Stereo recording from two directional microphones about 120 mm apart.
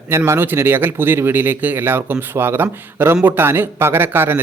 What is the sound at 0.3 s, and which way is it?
A man's voice, 20° right (ahead or behind).